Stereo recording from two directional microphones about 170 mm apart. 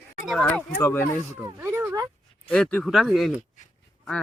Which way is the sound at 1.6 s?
15° right (ahead or behind).